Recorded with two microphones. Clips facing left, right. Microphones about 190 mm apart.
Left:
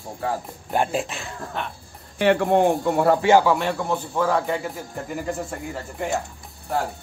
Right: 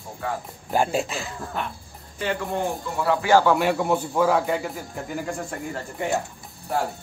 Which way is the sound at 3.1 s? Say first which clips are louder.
Right 1 dB; 25° left (ahead or behind).